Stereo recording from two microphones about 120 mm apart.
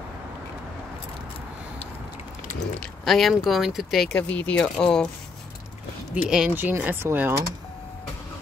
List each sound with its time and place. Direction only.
2.8 s speech: centre (ahead or behind)
4.2 s speech: 15° left (ahead or behind)
6.2 s speech: 5° right (ahead or behind)